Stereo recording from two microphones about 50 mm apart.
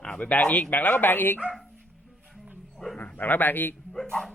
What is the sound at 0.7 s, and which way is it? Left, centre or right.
Speech, left.